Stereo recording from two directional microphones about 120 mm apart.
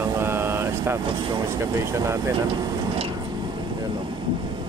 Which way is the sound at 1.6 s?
25° right (ahead or behind).